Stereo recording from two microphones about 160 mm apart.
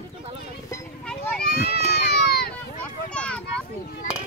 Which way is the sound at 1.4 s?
75° left (ahead or behind).